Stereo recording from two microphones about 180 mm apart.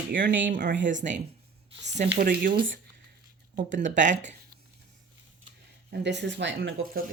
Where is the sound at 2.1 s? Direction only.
50° right (ahead or behind).